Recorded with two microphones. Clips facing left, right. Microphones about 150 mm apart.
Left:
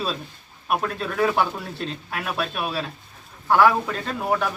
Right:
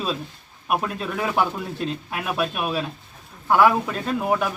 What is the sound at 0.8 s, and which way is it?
Speech, 10° right (ahead or behind).